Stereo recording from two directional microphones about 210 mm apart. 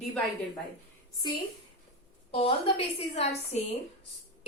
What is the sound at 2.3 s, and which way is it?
Speech, 25° left (ahead or behind).